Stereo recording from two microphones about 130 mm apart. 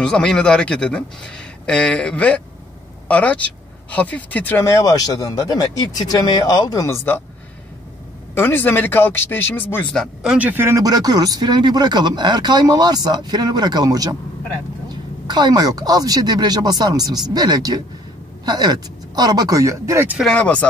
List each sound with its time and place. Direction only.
0.0 s a woman's voice: 5° left (ahead or behind)
8.4 s speech: 15° left (ahead or behind)
9.9 s speech: 5° right (ahead or behind); by 14.1 s 30° right (ahead or behind)
15.2 s speech: 35° right (ahead or behind)
20.2 s speech: 5° left (ahead or behind)